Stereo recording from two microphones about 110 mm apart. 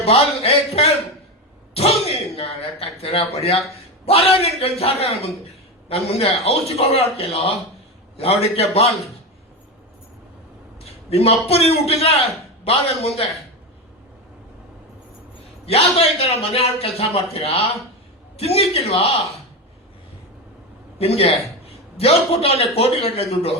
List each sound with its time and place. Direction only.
0.0 s a sound: 70° left (ahead or behind)
1.7 s a man's voice: 70° left (ahead or behind)
10.8 s a man's voice: 65° left (ahead or behind)
15.6 s a man's voice: 70° left (ahead or behind)
21.0 s a man's voice: 65° left (ahead or behind)